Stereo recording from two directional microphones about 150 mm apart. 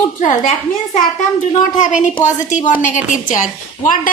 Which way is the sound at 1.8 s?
55° left (ahead or behind).